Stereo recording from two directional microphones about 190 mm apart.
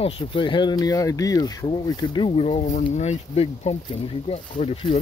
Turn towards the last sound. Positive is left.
turn(degrees=30)  # may be behind; listen again after turning